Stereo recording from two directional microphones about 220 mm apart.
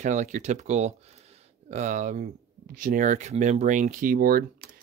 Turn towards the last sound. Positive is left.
turn(degrees=-40)  # may be behind; listen again after turning